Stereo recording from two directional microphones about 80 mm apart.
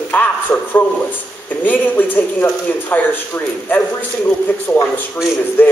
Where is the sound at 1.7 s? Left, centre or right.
Left.